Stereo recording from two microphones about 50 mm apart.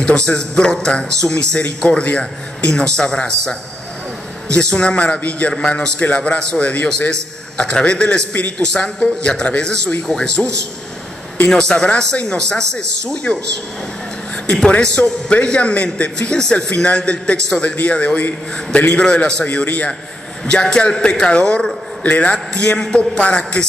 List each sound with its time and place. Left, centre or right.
0.0 s a man's voice: left
2.7 s a man's voice: centre
4.6 s a man's voice: left
5.5 s a man's voice: centre
5.9 s a man's voice: left
19.6 s a man's voice: left
20.6 s a man's voice: centre
22.8 s a man's voice: centre
23.1 s a man's voice: left